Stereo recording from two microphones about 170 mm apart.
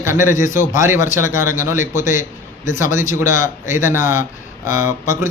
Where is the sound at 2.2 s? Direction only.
50° left (ahead or behind).